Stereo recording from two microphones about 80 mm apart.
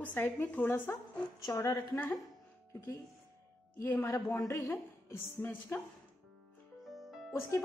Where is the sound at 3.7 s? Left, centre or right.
Left.